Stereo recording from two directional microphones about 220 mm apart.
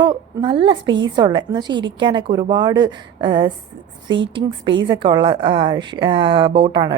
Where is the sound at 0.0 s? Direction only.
20° right (ahead or behind).